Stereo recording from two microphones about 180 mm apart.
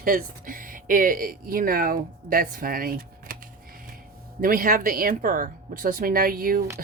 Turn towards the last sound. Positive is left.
turn(degrees=-55)  # may be behind; listen again after turning